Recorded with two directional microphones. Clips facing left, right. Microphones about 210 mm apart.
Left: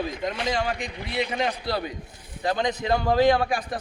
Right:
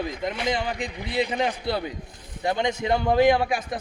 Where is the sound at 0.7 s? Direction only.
30° right (ahead or behind).